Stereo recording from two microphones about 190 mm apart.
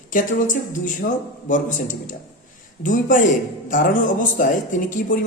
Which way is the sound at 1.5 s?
40° left (ahead or behind).